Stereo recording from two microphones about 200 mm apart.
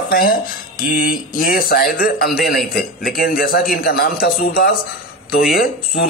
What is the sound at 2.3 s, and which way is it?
Speech, centre (ahead or behind).